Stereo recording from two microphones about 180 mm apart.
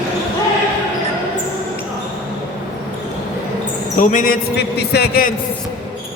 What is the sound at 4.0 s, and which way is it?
Speech, 45° left (ahead or behind).